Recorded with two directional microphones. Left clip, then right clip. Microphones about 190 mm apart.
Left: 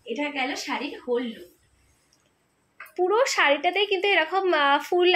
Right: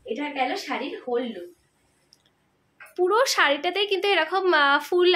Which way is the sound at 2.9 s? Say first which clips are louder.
Right 1 dB; 5° right (ahead or behind).